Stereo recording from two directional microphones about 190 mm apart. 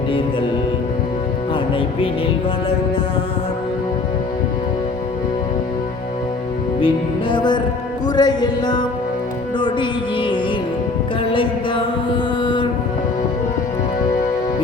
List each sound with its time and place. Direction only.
6.8 s music: 25° left (ahead or behind)
10.2 s music: 25° left (ahead or behind)
11.3 s mantra: 25° left (ahead or behind)